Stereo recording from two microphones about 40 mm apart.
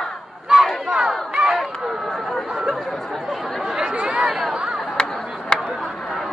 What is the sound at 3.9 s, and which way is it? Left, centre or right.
Chatter, right.